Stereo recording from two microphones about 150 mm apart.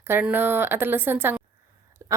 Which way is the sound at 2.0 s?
20° right (ahead or behind).